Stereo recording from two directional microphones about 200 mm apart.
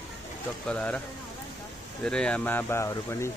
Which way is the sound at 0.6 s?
5° left (ahead or behind).